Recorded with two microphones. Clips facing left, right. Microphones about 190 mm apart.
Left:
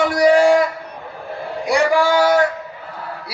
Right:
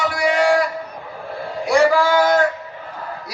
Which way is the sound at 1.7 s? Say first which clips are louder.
Right 1 dB; 15° left (ahead or behind).